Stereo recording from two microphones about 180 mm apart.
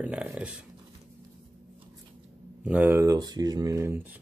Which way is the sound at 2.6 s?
10° right (ahead or behind).